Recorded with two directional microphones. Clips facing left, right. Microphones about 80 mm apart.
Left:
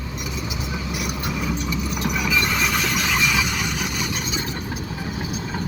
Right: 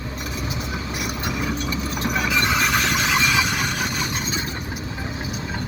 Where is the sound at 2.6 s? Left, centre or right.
Centre.